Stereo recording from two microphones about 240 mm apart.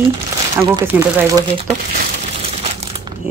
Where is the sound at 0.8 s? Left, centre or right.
Centre.